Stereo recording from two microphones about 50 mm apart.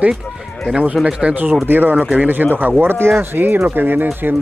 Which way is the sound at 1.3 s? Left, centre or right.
Right.